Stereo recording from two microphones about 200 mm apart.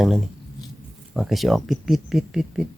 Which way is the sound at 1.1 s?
Centre (ahead or behind).